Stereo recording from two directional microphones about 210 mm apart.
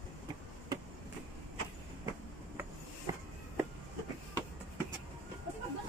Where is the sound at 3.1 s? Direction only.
15° right (ahead or behind).